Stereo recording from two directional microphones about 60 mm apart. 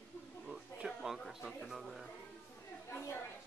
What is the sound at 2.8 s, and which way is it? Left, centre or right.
Speech, left.